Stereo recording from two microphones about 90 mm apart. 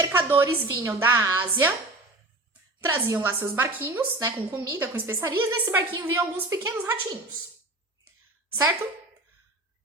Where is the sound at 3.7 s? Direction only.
20° right (ahead or behind).